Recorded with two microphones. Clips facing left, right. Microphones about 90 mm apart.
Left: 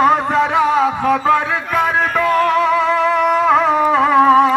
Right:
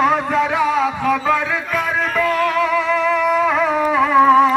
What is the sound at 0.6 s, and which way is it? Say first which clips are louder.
Music: left 3 dB; 35° left (ahead or behind).